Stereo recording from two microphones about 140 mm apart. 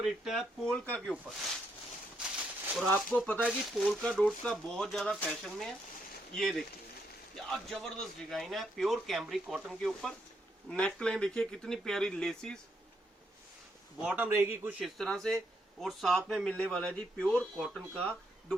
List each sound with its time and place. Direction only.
0.0 s a man's voice: centre (ahead or behind)
2.7 s a man's voice: centre (ahead or behind)
14.0 s a man's voice: 10° right (ahead or behind)
14.8 s a man's voice: centre (ahead or behind)